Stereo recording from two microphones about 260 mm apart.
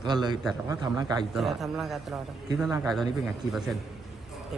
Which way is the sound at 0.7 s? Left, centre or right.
Centre.